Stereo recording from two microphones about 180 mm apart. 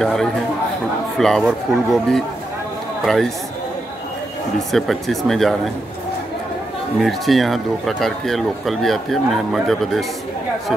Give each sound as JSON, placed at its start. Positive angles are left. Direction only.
{"t": 0.0, "sound": "speech", "side_deg": 5}
{"t": 4.7, "sound": "speech", "side_deg": 0}
{"t": 7.0, "sound": "speech", "side_deg": 0}